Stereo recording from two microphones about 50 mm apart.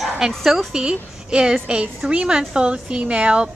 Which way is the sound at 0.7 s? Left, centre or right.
Centre.